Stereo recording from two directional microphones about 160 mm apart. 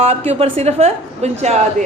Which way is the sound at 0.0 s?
40° right (ahead or behind).